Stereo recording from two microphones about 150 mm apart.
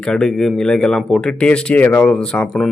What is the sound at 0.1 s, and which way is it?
A man's voice, 5° left (ahead or behind).